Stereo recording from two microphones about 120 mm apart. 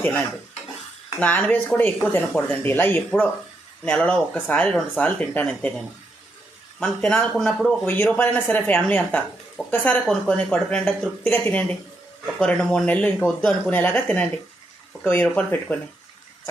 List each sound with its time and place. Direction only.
0.0 s a woman's voice: 10° left (ahead or behind)
6.7 s speech: 5° left (ahead or behind)
7.9 s a woman's voice: 15° left (ahead or behind)